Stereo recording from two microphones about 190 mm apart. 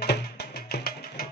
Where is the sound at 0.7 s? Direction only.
55° left (ahead or behind).